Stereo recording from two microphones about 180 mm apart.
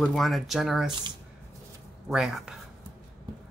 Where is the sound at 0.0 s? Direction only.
Centre (ahead or behind).